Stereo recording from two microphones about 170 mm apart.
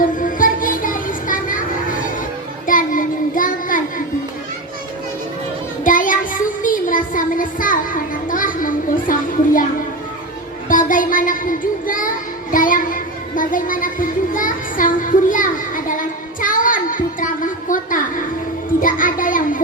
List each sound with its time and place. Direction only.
0.0 s music: 55° left (ahead or behind)
2.6 s child singing: 55° left (ahead or behind)
5.8 s child singing: 50° left (ahead or behind)
10.7 s child singing: 50° left (ahead or behind)